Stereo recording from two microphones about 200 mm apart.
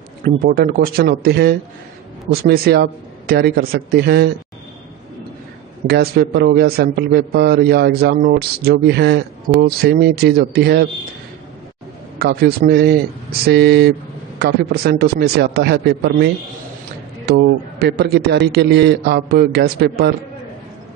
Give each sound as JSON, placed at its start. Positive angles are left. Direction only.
{"t": 0.2, "sound": "a man's voice", "side_deg": -50}
{"t": 5.9, "sound": "a man's voice", "side_deg": -55}
{"t": 12.2, "sound": "a man's voice", "side_deg": -50}
{"t": 17.3, "sound": "a man's voice", "side_deg": -55}